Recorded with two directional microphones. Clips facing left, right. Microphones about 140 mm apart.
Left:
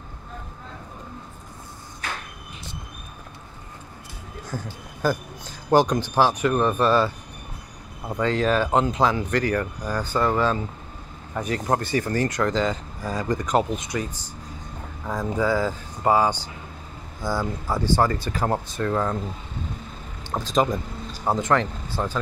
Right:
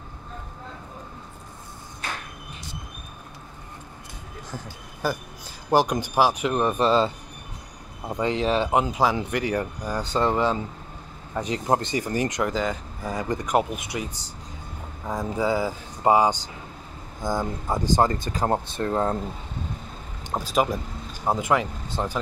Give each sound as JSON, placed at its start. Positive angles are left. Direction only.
{"t": 5.0, "sound": "speech", "side_deg": 0}
{"t": 8.1, "sound": "speech", "side_deg": -15}
{"t": 15.0, "sound": "speech", "side_deg": -15}
{"t": 20.2, "sound": "speech", "side_deg": -10}